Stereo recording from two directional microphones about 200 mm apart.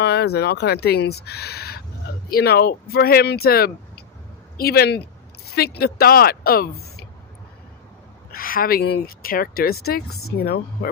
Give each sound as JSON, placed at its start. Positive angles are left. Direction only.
{"t": 0.0, "sound": "speech", "side_deg": 55}
{"t": 8.3, "sound": "speech", "side_deg": 45}
{"t": 10.1, "sound": "a woman's voice", "side_deg": 90}
{"t": 10.3, "sound": "speech", "side_deg": 50}